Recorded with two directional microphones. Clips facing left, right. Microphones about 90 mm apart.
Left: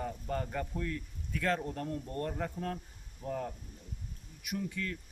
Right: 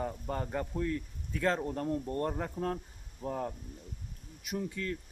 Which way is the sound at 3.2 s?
30° right (ahead or behind).